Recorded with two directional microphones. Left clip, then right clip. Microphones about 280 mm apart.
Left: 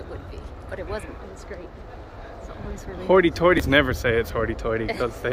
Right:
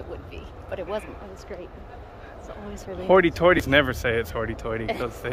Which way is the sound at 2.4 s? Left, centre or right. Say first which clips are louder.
Right 2 dB; right.